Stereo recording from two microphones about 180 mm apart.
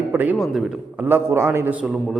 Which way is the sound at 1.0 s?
15° right (ahead or behind).